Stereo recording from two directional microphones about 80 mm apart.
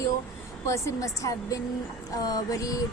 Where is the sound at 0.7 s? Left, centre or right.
Left.